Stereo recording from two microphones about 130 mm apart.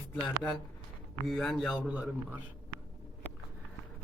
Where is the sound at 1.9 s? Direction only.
10° right (ahead or behind).